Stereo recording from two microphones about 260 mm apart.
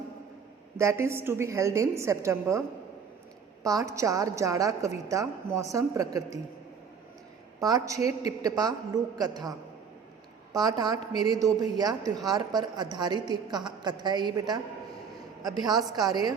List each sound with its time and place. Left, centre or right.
0.8 s a woman's voice: centre
7.6 s a woman's voice: centre